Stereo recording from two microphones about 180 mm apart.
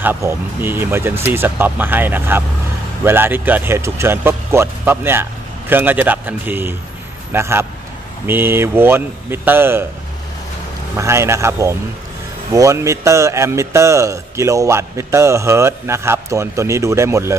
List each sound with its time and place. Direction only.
0.0 s a man's voice: 15° right (ahead or behind)
11.0 s a man's voice: 15° right (ahead or behind)